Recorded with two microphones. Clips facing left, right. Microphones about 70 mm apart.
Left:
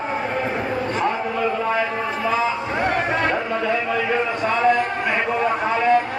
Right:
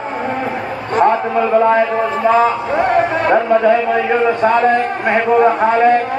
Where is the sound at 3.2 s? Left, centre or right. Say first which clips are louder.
Right 9 dB; right.